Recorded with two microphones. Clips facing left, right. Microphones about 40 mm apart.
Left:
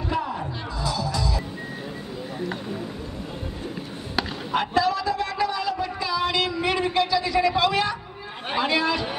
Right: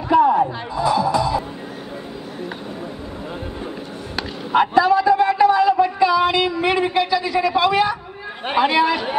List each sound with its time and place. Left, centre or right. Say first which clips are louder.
0.1 s speech: right 14 dB; centre
0.7 s music: right 10 dB; right
4.5 s a sound: right 9 dB; right
8.5 s speech: right 6 dB; centre